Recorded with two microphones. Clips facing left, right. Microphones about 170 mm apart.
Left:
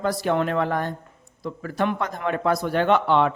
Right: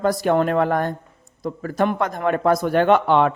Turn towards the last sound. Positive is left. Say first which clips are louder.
# right 3 dB
turn(degrees=-50)  # may be behind; listen again after turning